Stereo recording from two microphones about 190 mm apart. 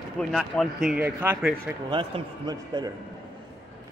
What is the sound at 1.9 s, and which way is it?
A man's voice, 25° right (ahead or behind).